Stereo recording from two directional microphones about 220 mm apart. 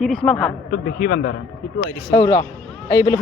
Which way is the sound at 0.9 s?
45° left (ahead or behind).